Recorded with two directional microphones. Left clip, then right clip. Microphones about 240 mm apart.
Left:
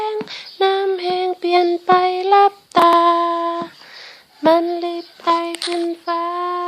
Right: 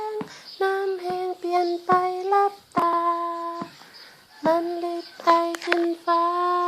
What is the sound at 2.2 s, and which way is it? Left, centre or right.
Humming, left.